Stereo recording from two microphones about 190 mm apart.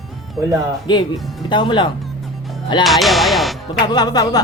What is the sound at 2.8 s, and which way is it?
Speech, centre (ahead or behind).